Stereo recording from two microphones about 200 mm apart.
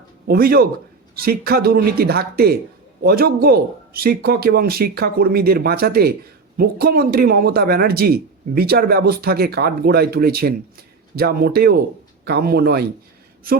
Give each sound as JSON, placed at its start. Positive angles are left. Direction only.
{"t": 0.3, "sound": "a man's voice", "side_deg": -50}